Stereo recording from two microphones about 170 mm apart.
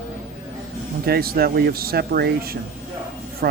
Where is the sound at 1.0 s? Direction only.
65° right (ahead or behind).